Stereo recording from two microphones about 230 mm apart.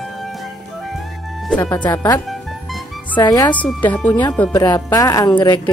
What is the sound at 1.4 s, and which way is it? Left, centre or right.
A woman's voice, centre.